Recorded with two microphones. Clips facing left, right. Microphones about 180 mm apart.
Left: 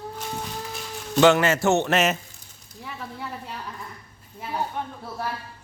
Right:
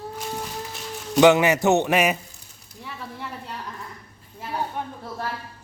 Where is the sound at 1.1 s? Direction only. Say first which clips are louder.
Right 2 dB; 15° right (ahead or behind).